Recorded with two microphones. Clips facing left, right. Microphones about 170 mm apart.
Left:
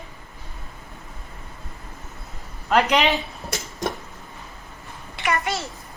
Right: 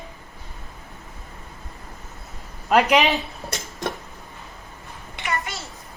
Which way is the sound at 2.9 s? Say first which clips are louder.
Right 1 dB; centre (ahead or behind).